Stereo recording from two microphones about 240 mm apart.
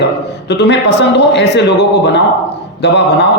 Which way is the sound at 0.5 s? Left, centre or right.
Left.